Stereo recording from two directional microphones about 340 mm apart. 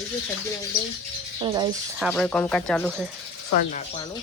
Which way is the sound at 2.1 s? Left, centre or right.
Centre.